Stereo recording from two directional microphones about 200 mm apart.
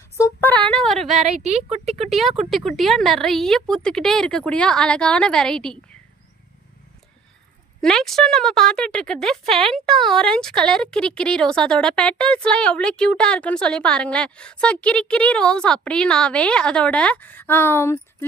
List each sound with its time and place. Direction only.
0.2 s a sound: 10° left (ahead or behind)
1.5 s speech: 30° right (ahead or behind)
2.0 s speech: centre (ahead or behind)
7.8 s speech: 5° left (ahead or behind)